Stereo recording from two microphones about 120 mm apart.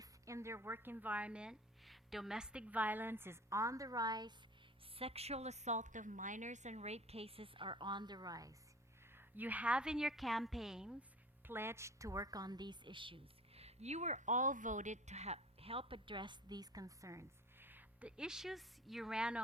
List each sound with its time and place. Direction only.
0.0 s a woman's voice: 25° right (ahead or behind)
4.9 s a woman's voice: 55° right (ahead or behind); by 8.5 s 30° right (ahead or behind)
9.1 s a woman's voice: 15° right (ahead or behind)
11.4 s a woman's voice: 20° right (ahead or behind)